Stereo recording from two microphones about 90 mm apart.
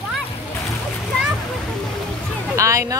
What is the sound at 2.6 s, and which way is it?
Speech, 35° right (ahead or behind).